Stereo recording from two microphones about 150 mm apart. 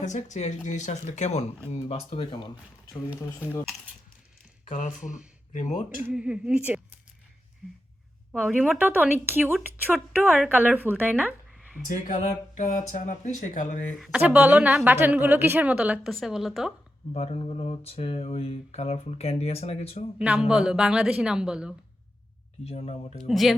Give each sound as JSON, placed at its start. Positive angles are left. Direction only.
{"t": 0.0, "sound": "speech", "side_deg": 55}
{"t": 3.2, "sound": "speech", "side_deg": 15}
{"t": 4.7, "sound": "speech", "side_deg": 55}
{"t": 6.0, "sound": "a woman's voice", "side_deg": -5}
{"t": 8.4, "sound": "a woman's voice", "side_deg": 5}
{"t": 8.6, "sound": "a woman's voice", "side_deg": -10}
{"t": 9.6, "sound": "a woman's voice", "side_deg": 0}
{"t": 10.5, "sound": "a woman's voice", "side_deg": -10}
{"t": 11.9, "sound": "speech", "side_deg": 55}
{"t": 14.0, "sound": "a woman's voice", "side_deg": -5}
{"t": 17.2, "sound": "speech", "side_deg": 40}
{"t": 20.2, "sound": "a woman's voice", "side_deg": -5}
{"t": 22.6, "sound": "speech", "side_deg": 40}
{"t": 23.3, "sound": "a woman's voice", "side_deg": 0}